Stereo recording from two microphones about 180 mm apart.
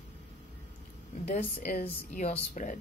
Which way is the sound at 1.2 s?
40° left (ahead or behind).